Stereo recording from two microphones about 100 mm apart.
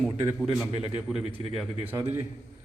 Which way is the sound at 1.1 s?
10° right (ahead or behind).